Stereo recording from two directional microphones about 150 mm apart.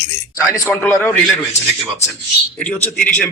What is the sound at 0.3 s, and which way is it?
Speech, 20° left (ahead or behind).